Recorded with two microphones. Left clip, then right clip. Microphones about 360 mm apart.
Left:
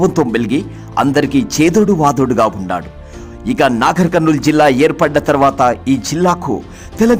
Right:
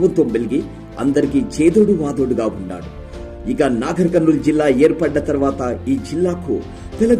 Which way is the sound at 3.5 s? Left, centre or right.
Left.